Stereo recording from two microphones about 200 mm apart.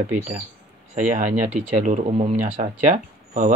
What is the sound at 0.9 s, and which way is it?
Speech, 40° right (ahead or behind).